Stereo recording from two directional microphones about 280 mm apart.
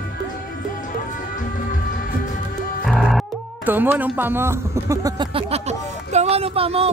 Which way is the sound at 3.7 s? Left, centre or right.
Centre.